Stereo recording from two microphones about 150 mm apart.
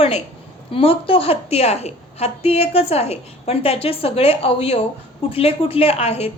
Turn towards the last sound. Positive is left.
turn(degrees=40)  # may be behind; listen again after turning